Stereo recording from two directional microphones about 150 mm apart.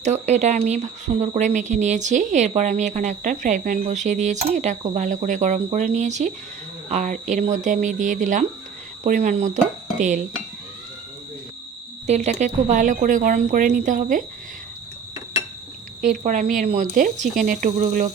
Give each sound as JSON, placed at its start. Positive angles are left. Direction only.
{"t": 0.0, "sound": "speech", "side_deg": -50}
{"t": 12.0, "sound": "speech", "side_deg": -50}
{"t": 16.2, "sound": "speech", "side_deg": -60}